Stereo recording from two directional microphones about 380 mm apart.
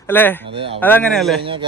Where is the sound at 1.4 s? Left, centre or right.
Centre.